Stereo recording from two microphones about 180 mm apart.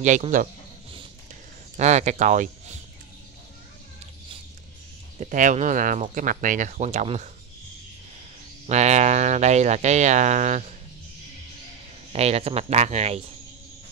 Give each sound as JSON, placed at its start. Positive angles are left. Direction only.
{"t": 0.0, "sound": "speech", "side_deg": -45}
{"t": 1.8, "sound": "speech", "side_deg": -40}
{"t": 5.2, "sound": "speech", "side_deg": -45}
{"t": 8.6, "sound": "speech", "side_deg": -40}
{"t": 12.1, "sound": "speech", "side_deg": -35}